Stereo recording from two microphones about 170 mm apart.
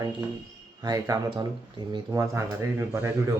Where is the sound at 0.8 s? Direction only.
20° right (ahead or behind).